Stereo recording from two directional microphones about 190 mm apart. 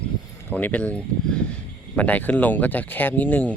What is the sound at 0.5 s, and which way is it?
Speech, 10° left (ahead or behind).